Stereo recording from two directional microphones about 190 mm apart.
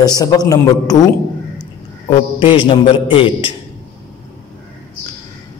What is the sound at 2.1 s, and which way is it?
Speech, 25° left (ahead or behind).